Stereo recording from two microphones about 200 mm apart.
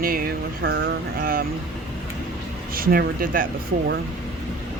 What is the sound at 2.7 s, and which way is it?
Speech, 45° right (ahead or behind).